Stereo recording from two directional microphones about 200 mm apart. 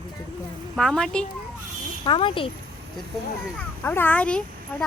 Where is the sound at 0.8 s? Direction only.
Centre (ahead or behind).